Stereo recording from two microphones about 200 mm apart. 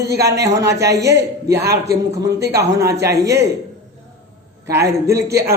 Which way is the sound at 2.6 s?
15° right (ahead or behind).